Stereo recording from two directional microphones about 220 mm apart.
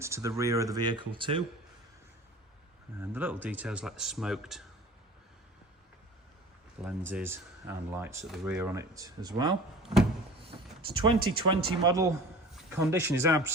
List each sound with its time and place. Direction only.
0.0 s speech: 15° right (ahead or behind)
3.0 s speech: 10° right (ahead or behind)
6.8 s speech: 5° right (ahead or behind)
9.8 s a sound: centre (ahead or behind)
10.9 s speech: 20° right (ahead or behind)